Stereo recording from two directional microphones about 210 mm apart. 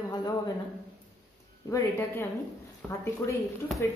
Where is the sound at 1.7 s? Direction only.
15° left (ahead or behind).